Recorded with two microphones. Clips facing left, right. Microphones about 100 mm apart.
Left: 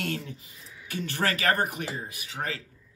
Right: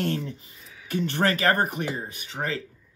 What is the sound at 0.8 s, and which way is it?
Speech, 30° right (ahead or behind).